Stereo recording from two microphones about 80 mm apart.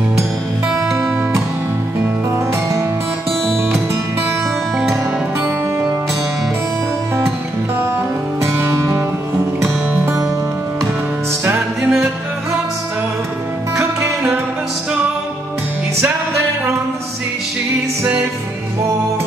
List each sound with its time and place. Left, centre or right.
2.5 s music: right
3.3 s music: centre
7.2 s music: right
11.4 s music: right